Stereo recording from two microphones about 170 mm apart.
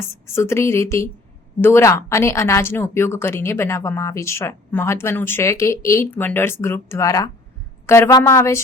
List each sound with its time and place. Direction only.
0.3 s a woman's voice: 15° left (ahead or behind)